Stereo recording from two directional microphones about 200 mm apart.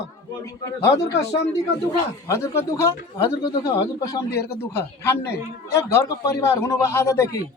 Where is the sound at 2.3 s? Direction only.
15° left (ahead or behind).